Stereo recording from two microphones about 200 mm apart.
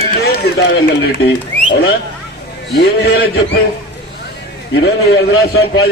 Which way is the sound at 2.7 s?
55° left (ahead or behind).